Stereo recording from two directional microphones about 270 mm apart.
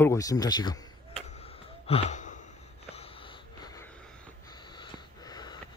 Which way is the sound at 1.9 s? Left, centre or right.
Left.